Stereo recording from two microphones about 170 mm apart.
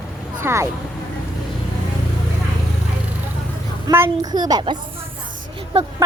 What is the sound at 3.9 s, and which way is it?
Speech, 20° right (ahead or behind).